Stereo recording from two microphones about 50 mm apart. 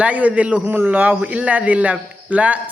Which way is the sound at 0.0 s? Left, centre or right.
Right.